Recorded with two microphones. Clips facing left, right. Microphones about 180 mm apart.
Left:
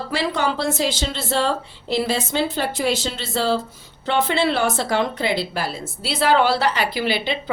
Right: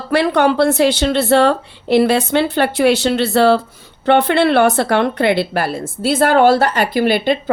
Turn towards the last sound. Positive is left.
turn(degrees=-50)  # may be behind; listen again after turning